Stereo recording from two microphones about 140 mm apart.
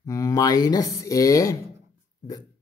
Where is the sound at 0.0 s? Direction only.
25° left (ahead or behind).